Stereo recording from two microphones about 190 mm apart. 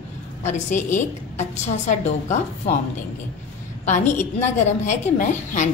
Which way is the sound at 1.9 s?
35° left (ahead or behind).